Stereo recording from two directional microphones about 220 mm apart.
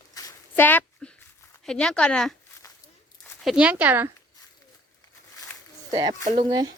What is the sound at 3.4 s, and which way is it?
Speech, 5° right (ahead or behind).